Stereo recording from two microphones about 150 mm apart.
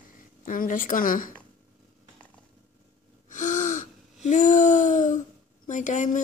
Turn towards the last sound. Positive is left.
turn(degrees=55)  # may be behind; listen again after turning